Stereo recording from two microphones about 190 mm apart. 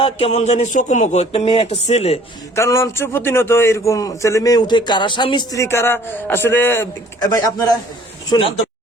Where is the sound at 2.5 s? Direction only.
15° left (ahead or behind).